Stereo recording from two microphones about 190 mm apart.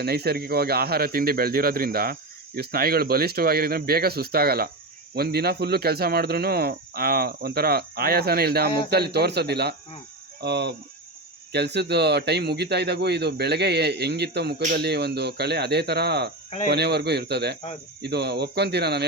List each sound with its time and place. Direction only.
0.0 s a man's voice: 55° right (ahead or behind)